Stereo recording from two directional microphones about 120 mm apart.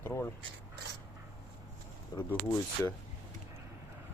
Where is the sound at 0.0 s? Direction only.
20° left (ahead or behind).